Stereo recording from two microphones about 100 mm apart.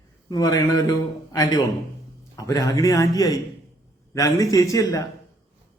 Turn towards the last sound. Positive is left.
turn(degrees=35)  # may be behind; listen again after turning